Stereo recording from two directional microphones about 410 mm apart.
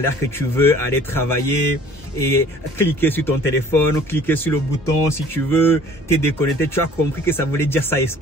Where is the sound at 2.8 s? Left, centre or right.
Centre.